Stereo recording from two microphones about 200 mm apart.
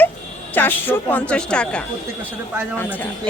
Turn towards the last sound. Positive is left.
turn(degrees=10)  # may be behind; listen again after turning